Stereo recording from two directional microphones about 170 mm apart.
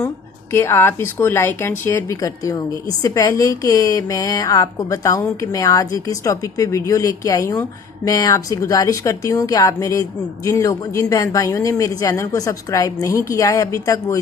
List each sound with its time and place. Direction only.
0.5 s a woman's voice: 15° left (ahead or behind)